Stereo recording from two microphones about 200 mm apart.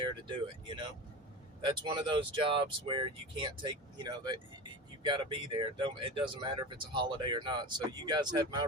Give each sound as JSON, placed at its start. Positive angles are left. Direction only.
{"t": 0.0, "sound": "speech", "side_deg": -25}